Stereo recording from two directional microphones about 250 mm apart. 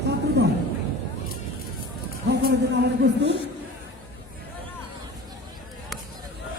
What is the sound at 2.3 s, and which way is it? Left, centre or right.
Music, right.